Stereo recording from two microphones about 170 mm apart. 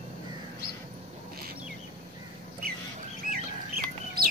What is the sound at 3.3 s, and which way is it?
Chicken, 60° right (ahead or behind).